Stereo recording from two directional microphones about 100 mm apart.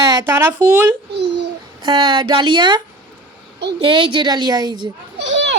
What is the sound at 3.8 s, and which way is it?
A woman's voice, 55° right (ahead or behind).